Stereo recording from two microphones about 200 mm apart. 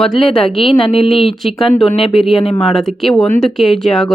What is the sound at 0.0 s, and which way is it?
Speech, centre (ahead or behind).